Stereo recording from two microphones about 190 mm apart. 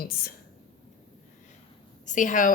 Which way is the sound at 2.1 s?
40° left (ahead or behind).